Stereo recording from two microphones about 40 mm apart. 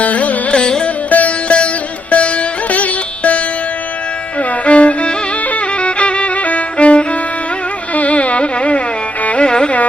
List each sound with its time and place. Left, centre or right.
0.0 s carnatic music: left
0.5 s music: left
1.1 s music: left
5.5 s violin: left
7.9 s carnatic music: left
9.2 s music: left
9.5 s music: left